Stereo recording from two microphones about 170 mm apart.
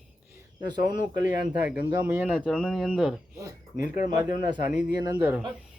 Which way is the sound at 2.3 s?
Centre (ahead or behind).